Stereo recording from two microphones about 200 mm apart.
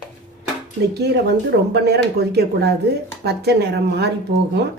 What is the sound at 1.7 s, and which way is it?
Speech, 55° right (ahead or behind).